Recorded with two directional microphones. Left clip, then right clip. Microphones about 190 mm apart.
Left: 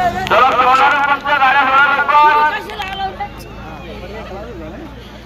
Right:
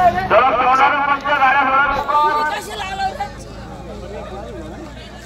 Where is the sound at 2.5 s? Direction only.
65° right (ahead or behind).